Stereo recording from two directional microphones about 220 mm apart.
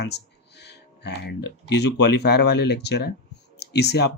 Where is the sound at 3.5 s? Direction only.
50° left (ahead or behind).